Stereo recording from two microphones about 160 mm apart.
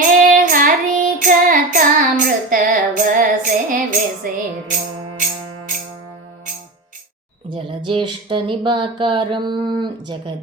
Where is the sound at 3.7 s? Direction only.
60° right (ahead or behind).